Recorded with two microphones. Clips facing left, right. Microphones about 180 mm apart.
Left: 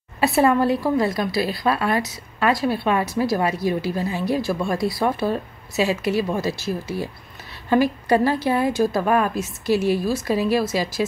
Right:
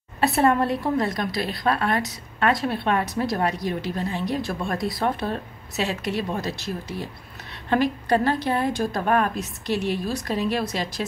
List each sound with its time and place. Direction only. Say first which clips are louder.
0.2 s a woman's voice: left 2 dB; centre (ahead or behind)